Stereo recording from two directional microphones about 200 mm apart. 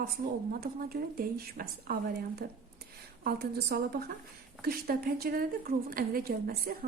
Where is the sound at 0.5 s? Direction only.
45° right (ahead or behind).